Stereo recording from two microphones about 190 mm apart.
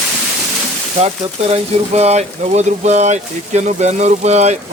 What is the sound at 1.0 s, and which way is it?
Speech, 35° right (ahead or behind).